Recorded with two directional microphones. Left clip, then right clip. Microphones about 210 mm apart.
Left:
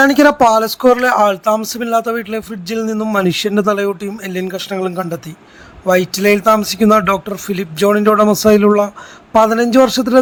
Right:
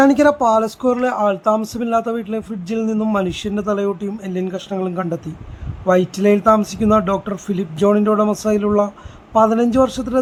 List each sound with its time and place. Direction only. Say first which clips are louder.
0.0 s speech: left 4 dB; 25° left (ahead or behind)